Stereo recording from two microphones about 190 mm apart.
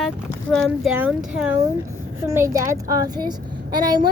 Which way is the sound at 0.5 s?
Centre (ahead or behind).